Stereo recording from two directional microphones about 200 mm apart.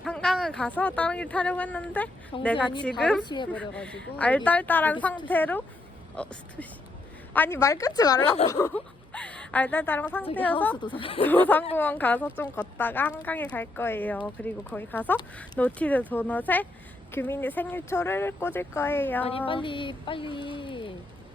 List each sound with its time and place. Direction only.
0.0 s a sound: 5° left (ahead or behind)
0.8 s speech: 5° left (ahead or behind)
2.3 s speech: 25° left (ahead or behind)
3.0 s a woman's voice: 5° left (ahead or behind)
3.2 s speech: 20° left (ahead or behind)
3.5 s a woman's voice: 5° left (ahead or behind)
7.3 s speech: 10° left (ahead or behind)
10.8 s speech: 25° left (ahead or behind)
11.2 s speech: 10° left (ahead or behind)
19.5 s speech: 25° left (ahead or behind)